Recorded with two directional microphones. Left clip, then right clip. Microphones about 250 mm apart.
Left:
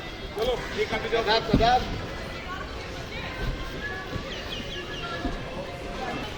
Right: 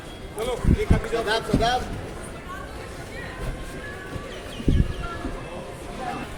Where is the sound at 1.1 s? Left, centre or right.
Right.